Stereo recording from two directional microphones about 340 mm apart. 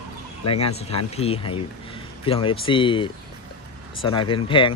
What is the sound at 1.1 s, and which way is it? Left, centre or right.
Speech, centre.